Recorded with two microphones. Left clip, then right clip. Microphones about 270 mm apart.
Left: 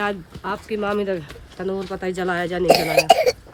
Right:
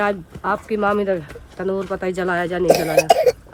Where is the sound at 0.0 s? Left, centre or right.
Centre.